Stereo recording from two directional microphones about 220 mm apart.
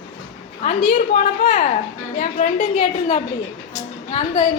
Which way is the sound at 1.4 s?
35° left (ahead or behind).